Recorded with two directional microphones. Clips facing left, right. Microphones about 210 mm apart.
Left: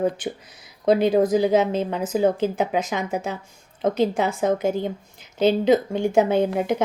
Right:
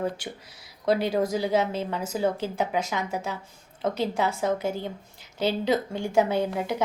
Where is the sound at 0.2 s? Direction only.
20° left (ahead or behind).